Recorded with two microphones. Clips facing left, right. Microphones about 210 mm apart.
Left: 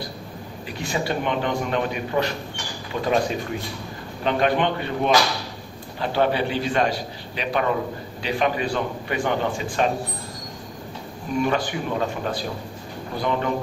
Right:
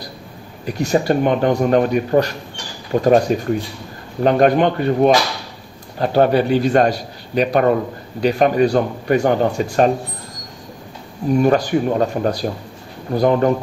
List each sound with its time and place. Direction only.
0.7 s a man's voice: 45° right (ahead or behind)
4.2 s a man's voice: 45° right (ahead or behind)
11.4 s a man's voice: 45° right (ahead or behind)